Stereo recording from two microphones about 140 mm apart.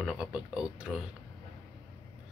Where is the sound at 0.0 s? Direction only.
5° right (ahead or behind).